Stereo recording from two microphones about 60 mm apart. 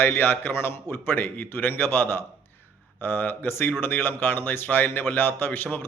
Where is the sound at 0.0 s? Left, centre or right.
Left.